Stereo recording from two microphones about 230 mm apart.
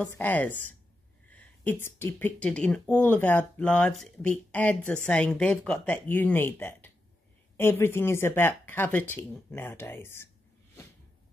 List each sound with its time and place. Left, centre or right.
0.0 s speech: centre